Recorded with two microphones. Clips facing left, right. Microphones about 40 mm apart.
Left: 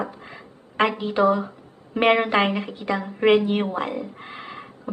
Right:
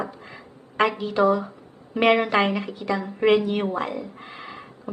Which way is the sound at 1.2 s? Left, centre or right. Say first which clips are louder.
Even; centre.